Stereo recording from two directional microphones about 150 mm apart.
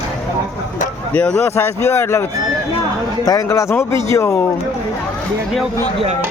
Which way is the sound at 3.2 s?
25° left (ahead or behind).